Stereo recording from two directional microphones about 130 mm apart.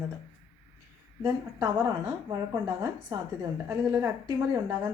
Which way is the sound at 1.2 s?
25° right (ahead or behind).